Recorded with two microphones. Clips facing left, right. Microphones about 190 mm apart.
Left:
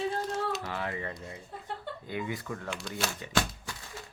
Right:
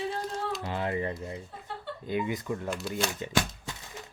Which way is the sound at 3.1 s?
20° right (ahead or behind).